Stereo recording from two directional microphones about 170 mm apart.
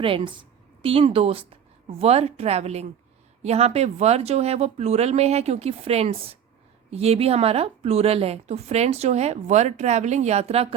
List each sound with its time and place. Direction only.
0.0 s a woman's voice: 30° right (ahead or behind)